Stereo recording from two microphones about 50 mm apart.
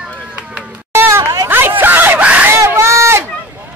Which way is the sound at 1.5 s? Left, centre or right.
Right.